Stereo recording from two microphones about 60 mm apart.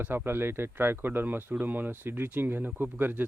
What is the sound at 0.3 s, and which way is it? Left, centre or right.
Speech, right.